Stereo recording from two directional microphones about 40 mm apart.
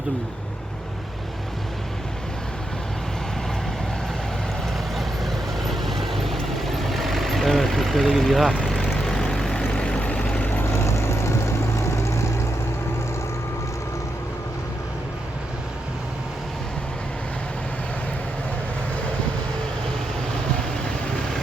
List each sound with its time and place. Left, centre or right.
4.9 s vehicle: centre
9.1 s vehicle: centre
10.0 s vehicle: left